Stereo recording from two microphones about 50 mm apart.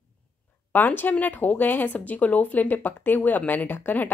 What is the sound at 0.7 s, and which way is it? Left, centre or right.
A woman's voice, left.